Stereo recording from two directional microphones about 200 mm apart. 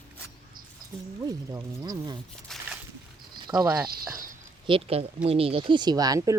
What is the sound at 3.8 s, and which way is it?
Speech, 50° right (ahead or behind).